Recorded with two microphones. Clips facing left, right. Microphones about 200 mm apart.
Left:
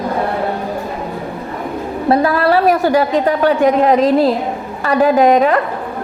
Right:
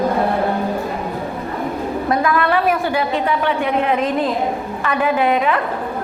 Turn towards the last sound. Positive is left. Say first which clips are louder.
# left 6 dB
turn(degrees=40)  # may be behind; listen again after turning